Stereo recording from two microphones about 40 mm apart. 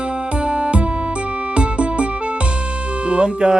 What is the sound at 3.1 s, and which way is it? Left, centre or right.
Music, right.